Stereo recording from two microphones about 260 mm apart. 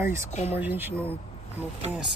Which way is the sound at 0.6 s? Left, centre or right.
Centre.